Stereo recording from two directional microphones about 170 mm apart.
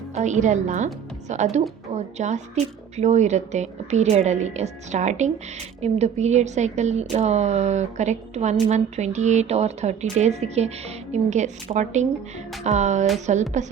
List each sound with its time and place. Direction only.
0.1 s a woman's voice: 45° right (ahead or behind)